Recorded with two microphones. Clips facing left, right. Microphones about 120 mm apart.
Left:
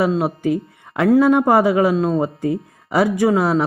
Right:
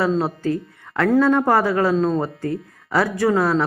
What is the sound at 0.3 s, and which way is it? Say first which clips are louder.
Speech: left 3 dB; 15° left (ahead or behind).